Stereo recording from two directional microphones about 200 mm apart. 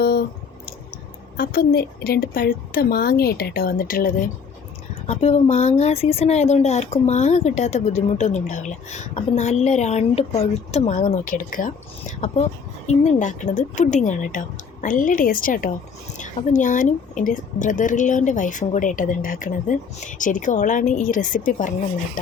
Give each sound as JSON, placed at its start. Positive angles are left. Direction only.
{"t": 0.0, "sound": "squish", "side_deg": 50}
{"t": 1.4, "sound": "a woman's voice", "side_deg": 50}
{"t": 5.0, "sound": "speech", "side_deg": 35}